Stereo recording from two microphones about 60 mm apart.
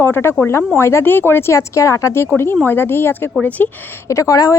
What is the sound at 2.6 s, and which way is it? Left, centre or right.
Speech, left.